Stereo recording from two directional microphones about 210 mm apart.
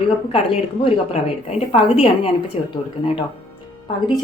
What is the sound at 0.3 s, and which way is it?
A woman's voice, 30° left (ahead or behind).